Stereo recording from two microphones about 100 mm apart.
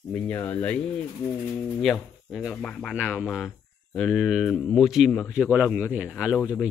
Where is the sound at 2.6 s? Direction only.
5° left (ahead or behind).